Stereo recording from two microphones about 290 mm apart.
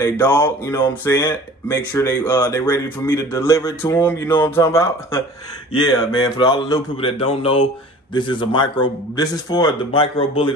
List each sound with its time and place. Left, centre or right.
0.0 s speech: centre